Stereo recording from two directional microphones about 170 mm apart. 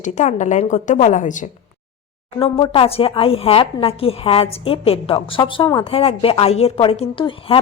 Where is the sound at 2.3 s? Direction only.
30° left (ahead or behind).